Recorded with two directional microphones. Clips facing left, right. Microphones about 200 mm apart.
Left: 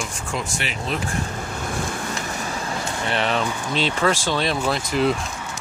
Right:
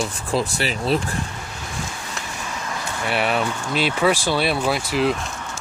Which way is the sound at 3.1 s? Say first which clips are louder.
Right 2 dB; 10° right (ahead or behind).